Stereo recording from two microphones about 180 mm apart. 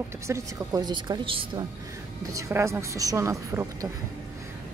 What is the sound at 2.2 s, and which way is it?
A woman's voice, 15° right (ahead or behind).